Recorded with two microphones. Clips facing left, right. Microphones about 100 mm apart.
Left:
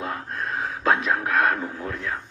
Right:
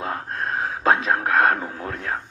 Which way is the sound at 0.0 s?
30° right (ahead or behind).